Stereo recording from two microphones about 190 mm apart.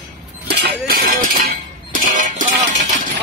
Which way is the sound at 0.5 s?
55° right (ahead or behind).